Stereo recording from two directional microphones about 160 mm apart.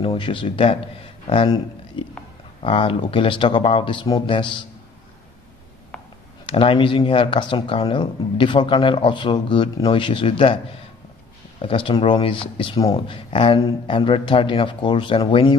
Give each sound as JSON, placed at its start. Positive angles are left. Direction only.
{"t": 0.0, "sound": "a man's voice", "side_deg": 35}
{"t": 5.9, "sound": "a sound", "side_deg": 5}
{"t": 6.4, "sound": "speech", "side_deg": 35}
{"t": 11.6, "sound": "speech", "side_deg": 35}